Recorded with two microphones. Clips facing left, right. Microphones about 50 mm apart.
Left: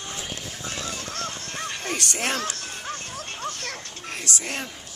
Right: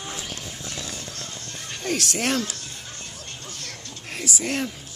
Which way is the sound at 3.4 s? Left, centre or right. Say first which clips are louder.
Left 9 dB; left.